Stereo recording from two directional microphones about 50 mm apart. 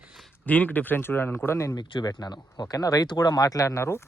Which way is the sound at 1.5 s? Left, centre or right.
Left.